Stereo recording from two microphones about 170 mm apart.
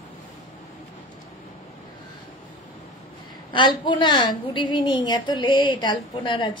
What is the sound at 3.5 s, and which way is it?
A woman's voice, 25° left (ahead or behind).